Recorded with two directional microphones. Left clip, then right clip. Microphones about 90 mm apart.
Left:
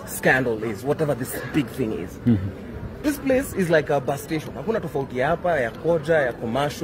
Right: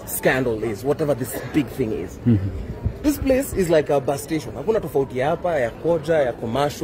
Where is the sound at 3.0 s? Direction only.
50° right (ahead or behind).